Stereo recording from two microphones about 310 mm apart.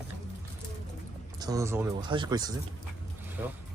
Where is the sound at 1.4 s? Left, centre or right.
Centre.